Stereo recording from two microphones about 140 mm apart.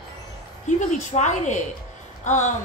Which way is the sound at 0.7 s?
60° left (ahead or behind).